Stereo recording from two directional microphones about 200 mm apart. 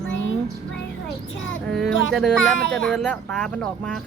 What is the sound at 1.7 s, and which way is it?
Speech, centre (ahead or behind).